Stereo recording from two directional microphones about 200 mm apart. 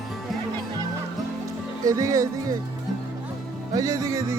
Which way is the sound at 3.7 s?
15° right (ahead or behind).